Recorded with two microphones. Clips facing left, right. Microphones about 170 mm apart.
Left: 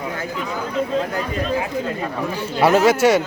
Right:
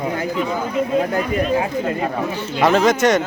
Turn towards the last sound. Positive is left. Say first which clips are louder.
# left 1 dB
turn(degrees=5)  # may be behind; listen again after turning